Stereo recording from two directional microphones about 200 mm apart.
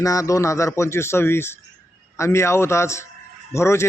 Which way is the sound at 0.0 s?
15° left (ahead or behind).